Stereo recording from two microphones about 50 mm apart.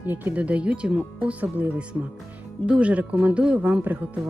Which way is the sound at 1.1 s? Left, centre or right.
Right.